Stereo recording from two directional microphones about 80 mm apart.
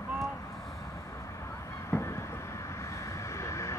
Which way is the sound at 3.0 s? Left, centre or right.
Left.